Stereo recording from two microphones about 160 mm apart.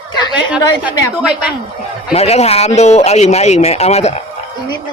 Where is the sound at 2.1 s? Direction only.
40° left (ahead or behind).